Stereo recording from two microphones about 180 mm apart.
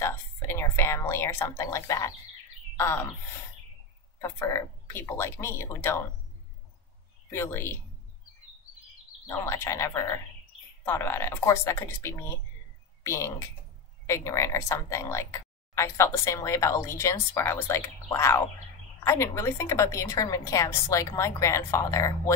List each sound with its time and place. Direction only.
0.0 s speech: 15° left (ahead or behind)
4.2 s speech: 15° left (ahead or behind)
7.2 s speech: 15° left (ahead or behind)
9.3 s speech: 15° left (ahead or behind)